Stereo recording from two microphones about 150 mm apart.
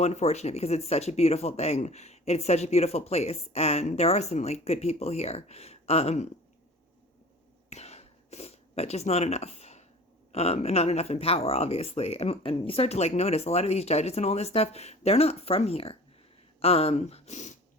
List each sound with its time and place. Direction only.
0.0 s speech: 45° left (ahead or behind)
7.7 s a sound: 45° left (ahead or behind)
10.3 s speech: 45° left (ahead or behind)